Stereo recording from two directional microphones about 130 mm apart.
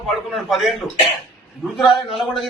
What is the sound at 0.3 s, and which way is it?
Speech, centre (ahead or behind).